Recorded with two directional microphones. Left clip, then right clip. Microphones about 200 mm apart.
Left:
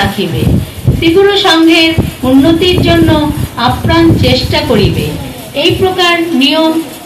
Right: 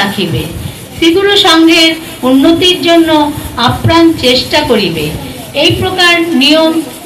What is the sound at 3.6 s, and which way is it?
A woman's voice, 30° right (ahead or behind).